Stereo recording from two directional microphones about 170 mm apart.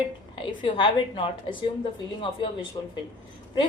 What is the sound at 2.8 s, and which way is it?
Speech, 25° left (ahead or behind).